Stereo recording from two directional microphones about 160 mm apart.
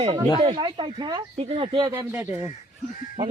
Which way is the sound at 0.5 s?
30° right (ahead or behind).